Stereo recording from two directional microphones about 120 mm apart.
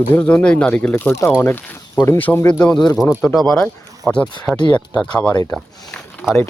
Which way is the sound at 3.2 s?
25° left (ahead or behind).